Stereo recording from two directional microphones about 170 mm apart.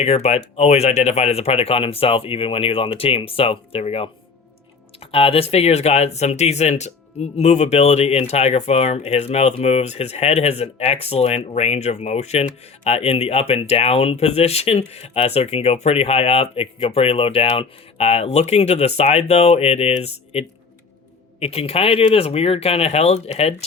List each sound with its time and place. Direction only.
0.0 s speech: 40° left (ahead or behind)